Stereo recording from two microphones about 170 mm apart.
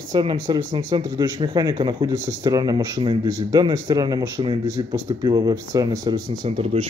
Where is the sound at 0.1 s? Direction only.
25° right (ahead or behind).